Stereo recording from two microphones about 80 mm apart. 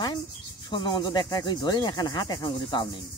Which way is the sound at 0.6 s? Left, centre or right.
Left.